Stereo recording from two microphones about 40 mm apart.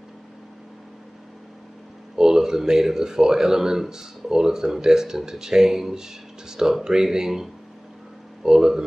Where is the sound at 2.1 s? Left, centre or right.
Centre.